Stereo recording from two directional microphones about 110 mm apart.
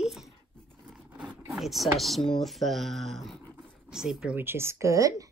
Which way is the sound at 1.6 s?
Centre (ahead or behind).